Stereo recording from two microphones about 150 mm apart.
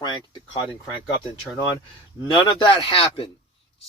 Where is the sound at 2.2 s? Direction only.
30° left (ahead or behind).